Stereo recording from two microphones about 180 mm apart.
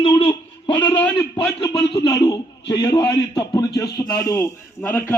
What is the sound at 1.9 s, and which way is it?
A man's voice, 20° left (ahead or behind).